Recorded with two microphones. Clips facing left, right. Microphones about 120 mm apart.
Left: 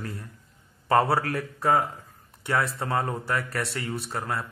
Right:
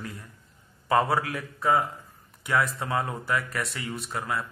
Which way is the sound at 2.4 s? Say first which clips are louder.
Even; 30° left (ahead or behind).